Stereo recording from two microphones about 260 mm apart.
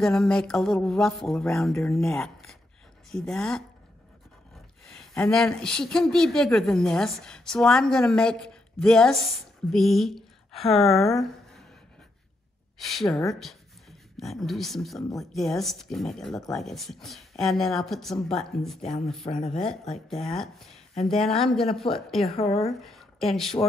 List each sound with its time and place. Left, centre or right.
0.0 s speech: centre
4.8 s a woman's voice: centre
12.7 s speech: centre
19.2 s speech: left
19.9 s speech: centre
22.2 s speech: left
22.8 s speech: centre